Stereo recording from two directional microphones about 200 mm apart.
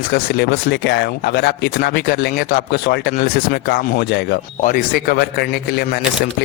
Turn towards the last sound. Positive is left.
turn(degrees=50)  # may be behind; listen again after turning